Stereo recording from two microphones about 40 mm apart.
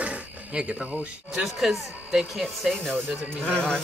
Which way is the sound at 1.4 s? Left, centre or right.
Centre.